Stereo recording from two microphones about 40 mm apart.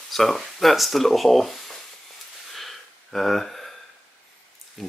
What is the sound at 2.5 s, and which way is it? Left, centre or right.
Gasp, centre.